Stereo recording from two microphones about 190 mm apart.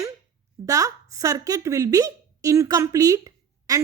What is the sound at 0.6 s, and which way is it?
Speech, 20° right (ahead or behind).